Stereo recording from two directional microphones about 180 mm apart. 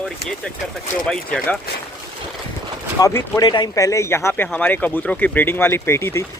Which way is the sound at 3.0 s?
15° left (ahead or behind).